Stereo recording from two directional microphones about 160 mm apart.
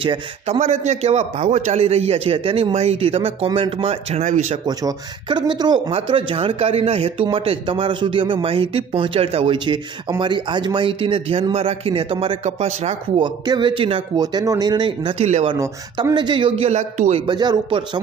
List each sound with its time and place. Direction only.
0.0 s speech: 30° right (ahead or behind)
0.6 s speech: 45° right (ahead or behind)
4.6 s speech: 25° right (ahead or behind); by 12.9 s 45° right (ahead or behind)
13.2 s speech: 30° right (ahead or behind)
15.5 s speech: 25° right (ahead or behind); by 17.2 s 45° right (ahead or behind)
17.3 s speech: 25° right (ahead or behind)